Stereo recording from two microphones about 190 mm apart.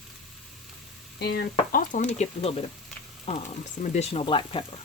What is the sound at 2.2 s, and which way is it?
Speech, 35° left (ahead or behind).